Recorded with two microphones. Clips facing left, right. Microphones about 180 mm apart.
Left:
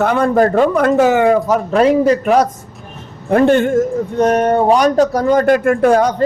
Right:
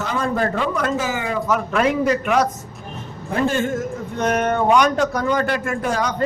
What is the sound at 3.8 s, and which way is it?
Speech, 35° left (ahead or behind).